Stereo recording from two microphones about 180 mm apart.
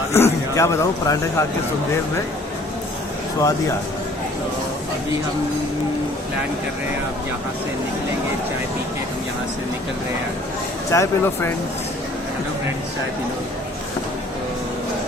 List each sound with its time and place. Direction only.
0.1 s a man's voice: 15° left (ahead or behind)
10.9 s a man's voice: 15° left (ahead or behind)